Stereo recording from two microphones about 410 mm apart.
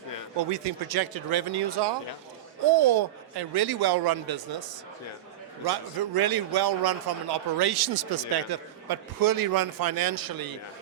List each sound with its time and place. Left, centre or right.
0.5 s a man's voice: right